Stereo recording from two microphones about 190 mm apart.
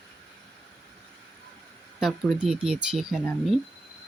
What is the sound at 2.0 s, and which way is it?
Speech, centre (ahead or behind).